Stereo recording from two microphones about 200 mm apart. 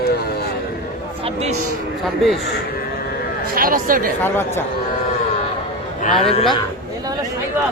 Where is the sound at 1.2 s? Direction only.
30° right (ahead or behind).